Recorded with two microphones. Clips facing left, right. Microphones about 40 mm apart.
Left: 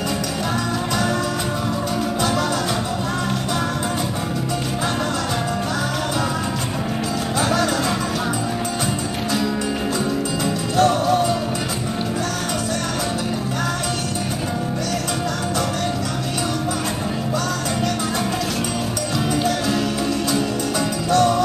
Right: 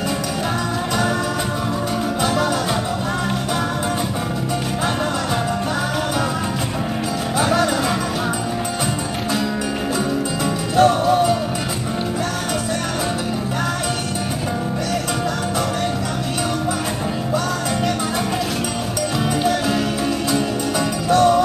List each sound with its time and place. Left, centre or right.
7.3 s music: centre
10.4 s music: centre
21.1 s music: centre